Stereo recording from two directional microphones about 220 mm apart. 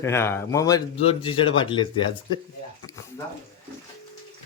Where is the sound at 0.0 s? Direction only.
10° left (ahead or behind).